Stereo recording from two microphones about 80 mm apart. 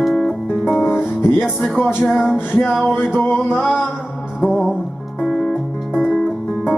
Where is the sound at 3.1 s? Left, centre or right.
Left.